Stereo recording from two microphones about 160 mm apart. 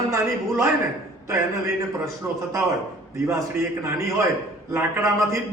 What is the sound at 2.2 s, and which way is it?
A man's voice, 15° right (ahead or behind).